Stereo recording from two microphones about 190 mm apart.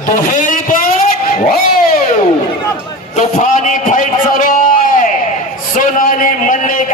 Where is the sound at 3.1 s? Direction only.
40° left (ahead or behind).